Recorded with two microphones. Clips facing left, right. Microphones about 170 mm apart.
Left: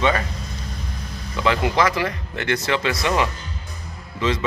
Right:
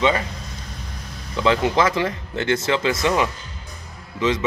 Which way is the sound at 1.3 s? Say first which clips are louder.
Right 2 dB; 25° right (ahead or behind).